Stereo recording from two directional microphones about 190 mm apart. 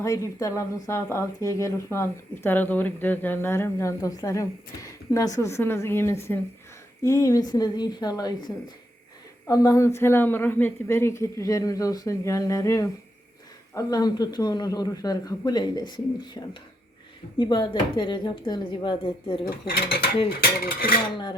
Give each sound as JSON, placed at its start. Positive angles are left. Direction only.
{"t": 0.0, "sound": "a man's voice", "side_deg": 15}
{"t": 9.5, "sound": "a man's voice", "side_deg": 20}
{"t": 17.3, "sound": "a man's voice", "side_deg": 20}
{"t": 19.5, "sound": "mechanisms", "side_deg": 55}
{"t": 20.4, "sound": "dishes", "side_deg": 50}